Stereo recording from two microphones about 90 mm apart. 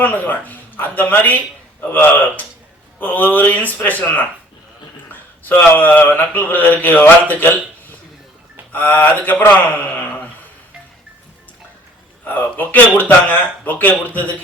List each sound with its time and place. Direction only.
0.0 s speech: 20° left (ahead or behind)
8.7 s speech: 20° left (ahead or behind)
12.2 s speech: 20° left (ahead or behind)